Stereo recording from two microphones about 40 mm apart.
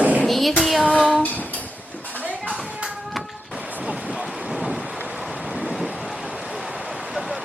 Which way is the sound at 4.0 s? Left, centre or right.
Right.